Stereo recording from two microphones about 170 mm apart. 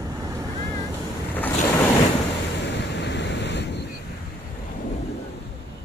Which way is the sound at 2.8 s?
90° left.